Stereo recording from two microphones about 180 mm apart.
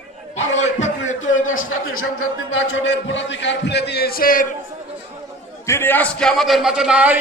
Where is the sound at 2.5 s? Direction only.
90° left; by 4.4 s 50° left (ahead or behind).